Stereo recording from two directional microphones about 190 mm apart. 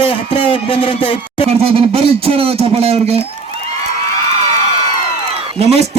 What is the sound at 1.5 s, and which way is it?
Speech, 30° right (ahead or behind).